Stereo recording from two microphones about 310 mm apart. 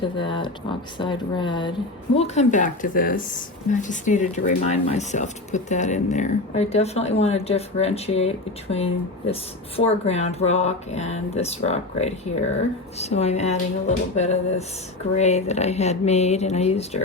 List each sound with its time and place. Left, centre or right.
0.2 s speech: centre